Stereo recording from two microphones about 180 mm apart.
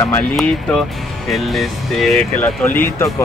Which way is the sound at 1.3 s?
Centre (ahead or behind).